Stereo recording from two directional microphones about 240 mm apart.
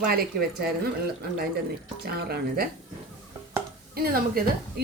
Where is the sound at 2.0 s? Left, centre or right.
Right.